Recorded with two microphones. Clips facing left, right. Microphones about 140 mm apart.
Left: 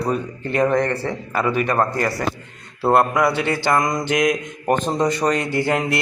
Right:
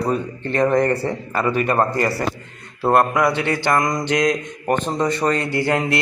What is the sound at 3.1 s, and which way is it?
Speech, 5° left (ahead or behind).